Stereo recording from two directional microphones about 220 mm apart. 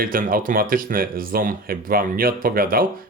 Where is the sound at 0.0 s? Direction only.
40° right (ahead or behind).